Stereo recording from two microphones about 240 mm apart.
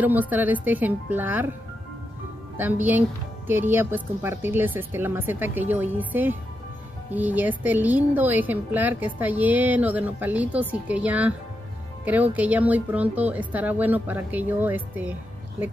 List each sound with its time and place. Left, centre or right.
0.0 s a woman's voice: centre
2.5 s a woman's voice: centre